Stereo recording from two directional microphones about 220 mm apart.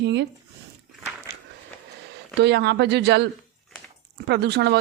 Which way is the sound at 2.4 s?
50° right (ahead or behind).